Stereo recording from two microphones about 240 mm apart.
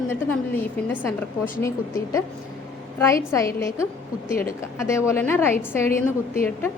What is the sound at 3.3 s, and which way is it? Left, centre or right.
A woman's voice, centre.